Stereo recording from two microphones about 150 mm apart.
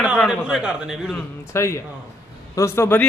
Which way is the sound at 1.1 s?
20° left (ahead or behind).